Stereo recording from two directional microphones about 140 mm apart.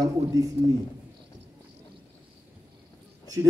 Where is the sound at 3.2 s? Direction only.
25° right (ahead or behind).